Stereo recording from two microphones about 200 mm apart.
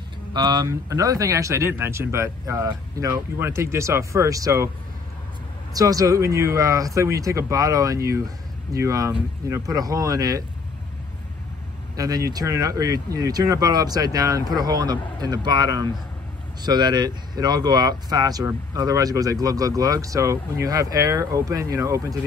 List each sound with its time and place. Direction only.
0.3 s speech: 20° right (ahead or behind)
5.8 s speech: 20° right (ahead or behind)
12.0 s speech: 20° right (ahead or behind)